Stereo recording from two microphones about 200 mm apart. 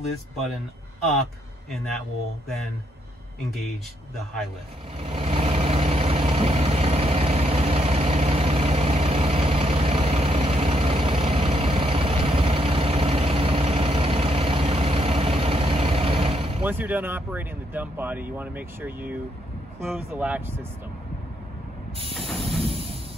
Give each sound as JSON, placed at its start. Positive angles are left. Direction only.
{"t": 1.7, "sound": "speech", "side_deg": 0}
{"t": 4.9, "sound": "vehicle", "side_deg": -30}
{"t": 16.6, "sound": "speech", "side_deg": -10}
{"t": 22.1, "sound": "hiss", "side_deg": 0}
{"t": 22.6, "sound": "a sound", "side_deg": -30}